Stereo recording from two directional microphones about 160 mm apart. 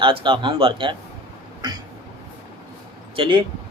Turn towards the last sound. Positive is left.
turn(degrees=-30)  # may be behind; listen again after turning